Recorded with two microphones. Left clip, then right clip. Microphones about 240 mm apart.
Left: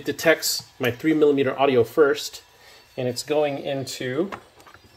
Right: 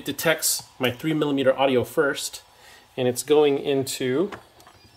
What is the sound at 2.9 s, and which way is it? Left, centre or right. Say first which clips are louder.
Speech: right 4 dB; centre.